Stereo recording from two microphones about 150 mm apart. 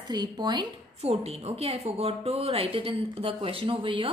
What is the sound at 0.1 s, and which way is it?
Speech, 30° right (ahead or behind).